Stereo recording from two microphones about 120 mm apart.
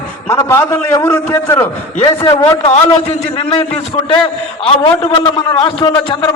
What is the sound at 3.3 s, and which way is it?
A man's voice, 55° left (ahead or behind).